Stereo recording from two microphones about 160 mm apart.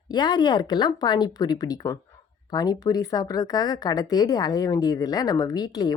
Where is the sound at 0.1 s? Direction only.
25° left (ahead or behind).